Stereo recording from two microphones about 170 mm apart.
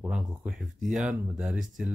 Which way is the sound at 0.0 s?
10° right (ahead or behind).